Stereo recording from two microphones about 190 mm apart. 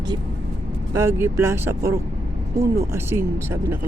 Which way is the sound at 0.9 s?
15° right (ahead or behind).